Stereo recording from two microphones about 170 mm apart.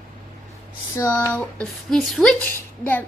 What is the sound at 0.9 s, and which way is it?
A child's voice, 20° left (ahead or behind).